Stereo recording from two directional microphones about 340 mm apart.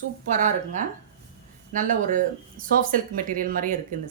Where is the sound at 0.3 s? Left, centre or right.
Right.